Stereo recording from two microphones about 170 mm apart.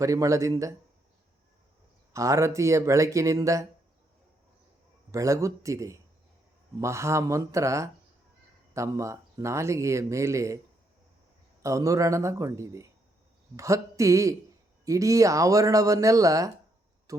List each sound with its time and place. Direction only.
0.0 s speech: 20° right (ahead or behind)
2.1 s speech: 15° right (ahead or behind)
5.1 s speech: 20° right (ahead or behind)
11.6 s speech: 20° right (ahead or behind)